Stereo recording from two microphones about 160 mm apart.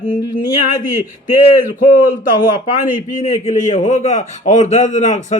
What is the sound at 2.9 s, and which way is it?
A man's voice, 55° left (ahead or behind).